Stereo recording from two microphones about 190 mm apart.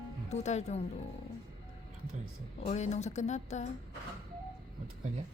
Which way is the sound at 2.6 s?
35° left (ahead or behind).